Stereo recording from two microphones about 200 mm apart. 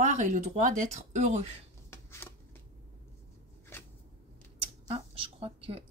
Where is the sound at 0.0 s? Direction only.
40° right (ahead or behind).